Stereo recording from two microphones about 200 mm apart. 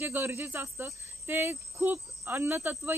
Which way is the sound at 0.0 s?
10° right (ahead or behind).